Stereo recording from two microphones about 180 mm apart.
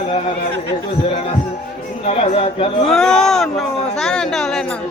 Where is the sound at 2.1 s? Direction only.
30° left (ahead or behind).